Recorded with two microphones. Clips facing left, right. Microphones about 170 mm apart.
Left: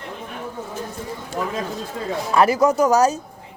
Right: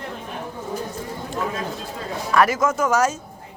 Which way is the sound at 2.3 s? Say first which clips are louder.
Left 3 dB; 30° left (ahead or behind).